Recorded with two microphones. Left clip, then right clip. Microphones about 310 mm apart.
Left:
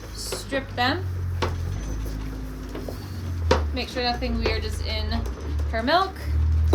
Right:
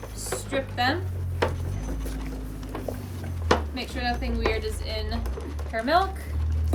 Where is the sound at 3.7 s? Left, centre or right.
Centre.